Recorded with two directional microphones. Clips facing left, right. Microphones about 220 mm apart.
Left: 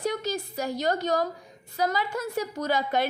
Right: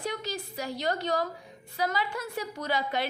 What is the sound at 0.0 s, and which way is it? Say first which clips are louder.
A woman's voice: left 5 dB; 45° left (ahead or behind).